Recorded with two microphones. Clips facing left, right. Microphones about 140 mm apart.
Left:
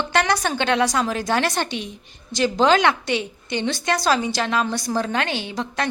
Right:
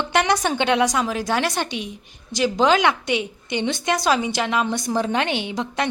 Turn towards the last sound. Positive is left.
turn(degrees=-20)  # may be behind; listen again after turning